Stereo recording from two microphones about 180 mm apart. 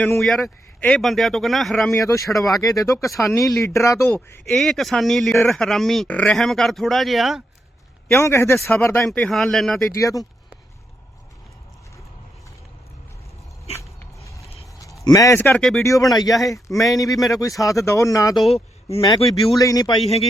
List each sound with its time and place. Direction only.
0.0 s speech: 5° left (ahead or behind)
1.9 s speech: 15° left (ahead or behind)
4.4 s speech: centre (ahead or behind)
8.1 s speech: 15° left (ahead or behind)
9.9 s speech: 20° left (ahead or behind)
14.3 s vehicle: 15° left (ahead or behind)
15.0 s speech: 20° left (ahead or behind)
15.4 s speech: 5° left (ahead or behind)
15.8 s speech: 15° left (ahead or behind)
18.3 s speech: centre (ahead or behind)
18.9 s speech: 20° left (ahead or behind)